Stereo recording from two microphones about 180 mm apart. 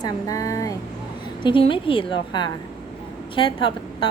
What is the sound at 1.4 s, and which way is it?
A woman's voice, 30° left (ahead or behind).